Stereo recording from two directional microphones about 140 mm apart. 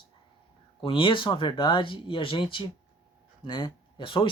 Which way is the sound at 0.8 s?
40° left (ahead or behind).